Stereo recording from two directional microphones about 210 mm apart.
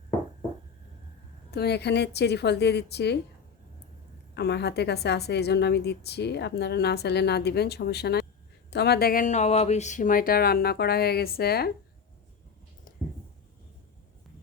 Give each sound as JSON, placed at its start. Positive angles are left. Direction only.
{"t": 1.5, "sound": "a woman's voice", "side_deg": 50}
{"t": 4.4, "sound": "a woman's voice", "side_deg": 55}